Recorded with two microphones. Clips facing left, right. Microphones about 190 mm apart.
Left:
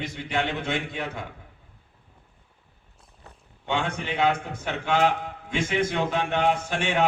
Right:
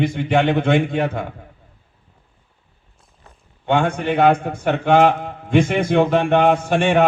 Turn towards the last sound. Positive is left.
turn(degrees=-60)  # may be behind; listen again after turning